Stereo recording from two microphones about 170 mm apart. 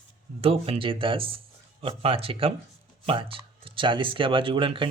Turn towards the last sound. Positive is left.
turn(degrees=-30)  # may be behind; listen again after turning